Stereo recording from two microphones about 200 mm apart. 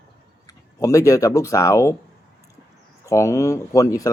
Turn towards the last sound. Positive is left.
turn(degrees=15)  # may be behind; listen again after turning